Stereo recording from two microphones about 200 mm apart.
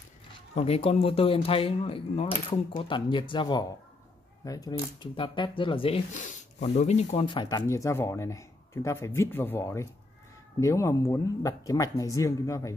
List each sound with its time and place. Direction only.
0.3 s speech: 30° left (ahead or behind); by 12.7 s 15° left (ahead or behind)